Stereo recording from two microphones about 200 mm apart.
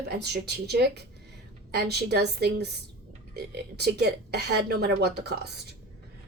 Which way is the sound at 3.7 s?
55° right (ahead or behind).